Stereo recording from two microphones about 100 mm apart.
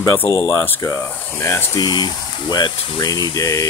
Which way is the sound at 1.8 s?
40° left (ahead or behind).